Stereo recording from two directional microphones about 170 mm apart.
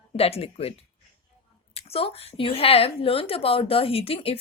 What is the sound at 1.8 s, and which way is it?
Speech, 35° left (ahead or behind).